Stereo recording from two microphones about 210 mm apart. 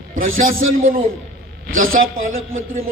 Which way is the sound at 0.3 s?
75° right (ahead or behind).